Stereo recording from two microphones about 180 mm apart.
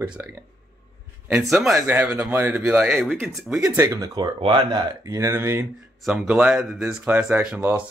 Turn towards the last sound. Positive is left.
turn(degrees=-10)  # may be behind; listen again after turning